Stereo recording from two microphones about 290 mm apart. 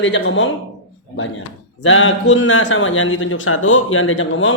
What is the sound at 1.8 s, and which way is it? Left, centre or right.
A man's voice, left.